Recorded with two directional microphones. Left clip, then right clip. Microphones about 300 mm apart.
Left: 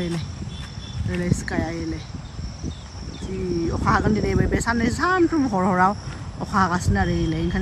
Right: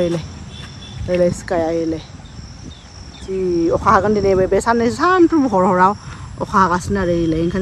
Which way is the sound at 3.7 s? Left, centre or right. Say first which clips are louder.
Right 8 dB; centre.